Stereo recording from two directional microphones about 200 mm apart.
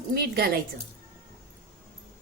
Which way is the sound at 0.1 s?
50° right (ahead or behind).